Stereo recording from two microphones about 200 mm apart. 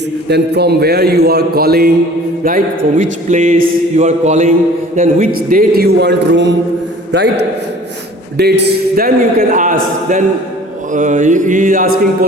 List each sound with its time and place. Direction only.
0.3 s a man's voice: 55° right (ahead or behind)
3.0 s a man's voice: 40° right (ahead or behind)